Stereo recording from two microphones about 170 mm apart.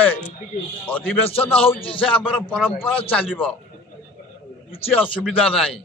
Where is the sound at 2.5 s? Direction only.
5° left (ahead or behind).